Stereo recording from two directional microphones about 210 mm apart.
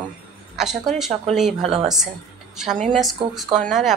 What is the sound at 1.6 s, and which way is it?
Speech, 30° right (ahead or behind).